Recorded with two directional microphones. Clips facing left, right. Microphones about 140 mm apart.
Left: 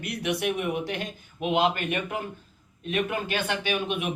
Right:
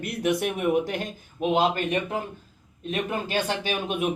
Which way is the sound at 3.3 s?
35° right (ahead or behind).